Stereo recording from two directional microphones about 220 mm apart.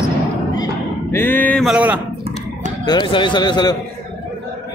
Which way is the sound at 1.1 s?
10° left (ahead or behind).